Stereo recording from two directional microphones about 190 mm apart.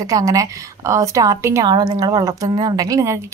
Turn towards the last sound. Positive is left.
turn(degrees=-20)  # may be behind; listen again after turning